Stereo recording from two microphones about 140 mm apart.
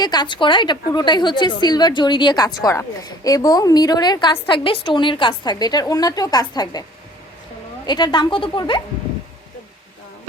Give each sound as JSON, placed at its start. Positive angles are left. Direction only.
{"t": 0.0, "sound": "a woman's voice", "side_deg": 30}
{"t": 7.9, "sound": "a woman's voice", "side_deg": 30}